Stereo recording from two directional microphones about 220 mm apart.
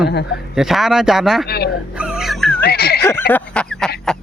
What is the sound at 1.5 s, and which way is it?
Speech, 45° left (ahead or behind).